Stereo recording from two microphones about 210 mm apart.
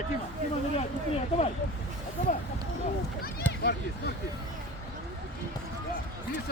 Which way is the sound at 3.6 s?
50° left (ahead or behind).